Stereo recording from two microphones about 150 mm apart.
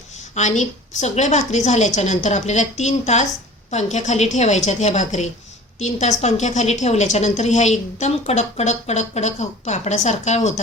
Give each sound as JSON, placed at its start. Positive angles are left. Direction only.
{"t": 0.2, "sound": "a woman's voice", "side_deg": 50}